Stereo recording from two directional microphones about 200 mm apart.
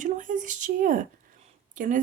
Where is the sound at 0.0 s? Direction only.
40° right (ahead or behind).